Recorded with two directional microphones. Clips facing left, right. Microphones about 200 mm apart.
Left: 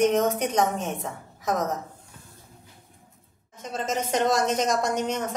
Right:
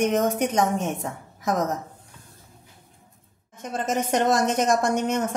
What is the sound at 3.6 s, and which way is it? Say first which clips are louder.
A woman's voice: right 3 dB; 50° right (ahead or behind).